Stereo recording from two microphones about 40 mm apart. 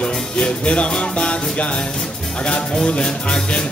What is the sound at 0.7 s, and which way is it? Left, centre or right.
Music, left.